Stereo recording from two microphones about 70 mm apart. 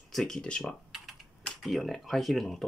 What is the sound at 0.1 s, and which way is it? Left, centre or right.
Speech, centre.